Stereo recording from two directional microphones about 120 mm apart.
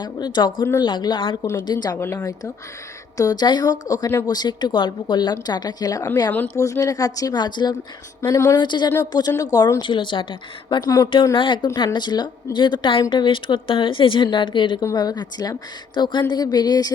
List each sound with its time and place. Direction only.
0.0 s speech: 35° left (ahead or behind)
2.0 s speech: 20° left (ahead or behind); by 7.8 s 35° left (ahead or behind)
8.2 s speech: 20° left (ahead or behind)
8.5 s speech: 40° left (ahead or behind)
9.8 s a woman's voice: 40° left (ahead or behind)